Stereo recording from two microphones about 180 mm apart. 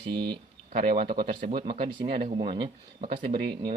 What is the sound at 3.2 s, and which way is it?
Speech, 55° right (ahead or behind).